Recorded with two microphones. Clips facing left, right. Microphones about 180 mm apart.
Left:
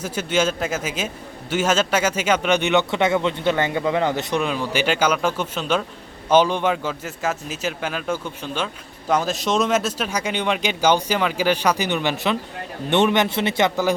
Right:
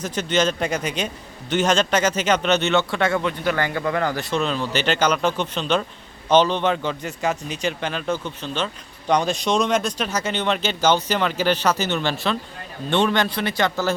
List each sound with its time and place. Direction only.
0.0 s a man's voice: 10° left (ahead or behind)